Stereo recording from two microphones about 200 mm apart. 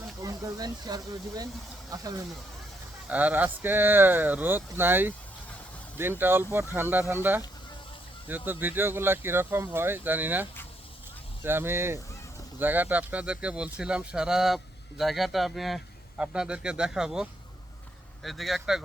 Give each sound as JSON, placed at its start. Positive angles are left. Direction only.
{"t": 0.2, "sound": "speech", "side_deg": -15}
{"t": 3.1, "sound": "speech", "side_deg": -5}
{"t": 8.4, "sound": "speech", "side_deg": -10}
{"t": 11.4, "sound": "speech", "side_deg": -10}